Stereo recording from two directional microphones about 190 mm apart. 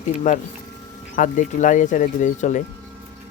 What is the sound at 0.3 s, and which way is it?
A man's voice, 45° left (ahead or behind).